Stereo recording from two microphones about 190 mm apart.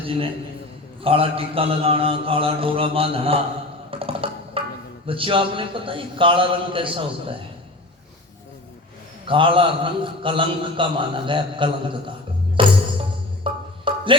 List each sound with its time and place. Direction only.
1.0 s a man's voice: 30° right (ahead or behind)
3.9 s music: 30° right (ahead or behind)
5.0 s a man's voice: 30° right (ahead or behind)
9.2 s a man's voice: 25° right (ahead or behind)
12.6 s music: 25° right (ahead or behind)